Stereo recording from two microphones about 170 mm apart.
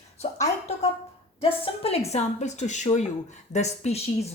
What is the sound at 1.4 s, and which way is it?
A woman's voice, 35° left (ahead or behind).